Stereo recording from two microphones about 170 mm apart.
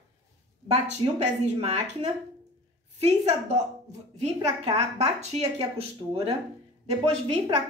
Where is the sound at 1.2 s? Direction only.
40° right (ahead or behind).